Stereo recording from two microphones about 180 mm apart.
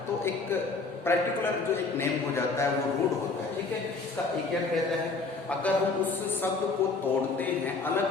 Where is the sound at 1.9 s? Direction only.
15° left (ahead or behind).